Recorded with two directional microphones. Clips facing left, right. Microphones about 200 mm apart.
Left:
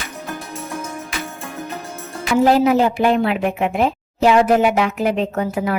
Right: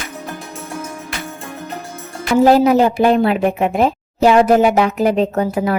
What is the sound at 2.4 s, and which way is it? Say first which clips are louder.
A woman's voice: right 3 dB; 40° right (ahead or behind).